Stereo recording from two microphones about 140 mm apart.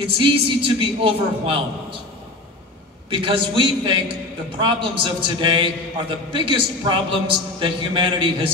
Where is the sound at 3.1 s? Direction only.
40° right (ahead or behind).